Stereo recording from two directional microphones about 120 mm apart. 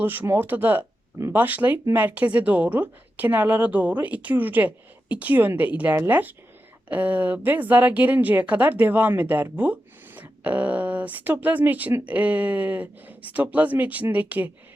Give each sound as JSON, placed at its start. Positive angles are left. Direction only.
{"t": 0.0, "sound": "a woman's voice", "side_deg": -15}